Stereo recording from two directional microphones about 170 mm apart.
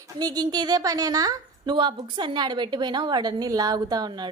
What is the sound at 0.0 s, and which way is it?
A woman's voice, 25° right (ahead or behind).